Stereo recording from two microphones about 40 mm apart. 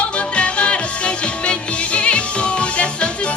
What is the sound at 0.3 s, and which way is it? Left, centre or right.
Music, left.